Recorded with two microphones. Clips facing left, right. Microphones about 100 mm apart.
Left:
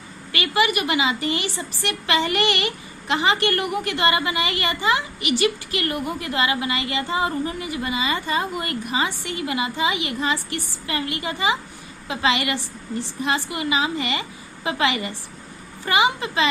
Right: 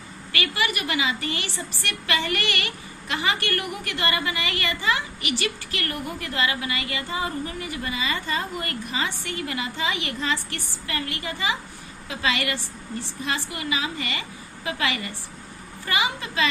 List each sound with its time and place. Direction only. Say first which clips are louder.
0.3 s a woman's voice: left 5 dB; 20° left (ahead or behind)